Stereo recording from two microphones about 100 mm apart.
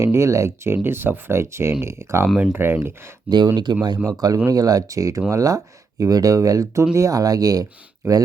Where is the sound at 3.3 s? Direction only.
50° right (ahead or behind).